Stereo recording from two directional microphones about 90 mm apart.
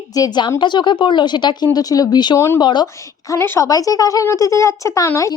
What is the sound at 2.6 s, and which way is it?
Speech, 55° left (ahead or behind).